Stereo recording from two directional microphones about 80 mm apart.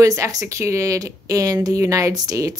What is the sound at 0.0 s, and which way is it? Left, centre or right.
A woman's voice, right.